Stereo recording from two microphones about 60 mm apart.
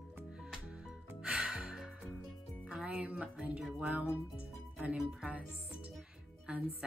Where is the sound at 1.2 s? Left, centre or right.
Centre.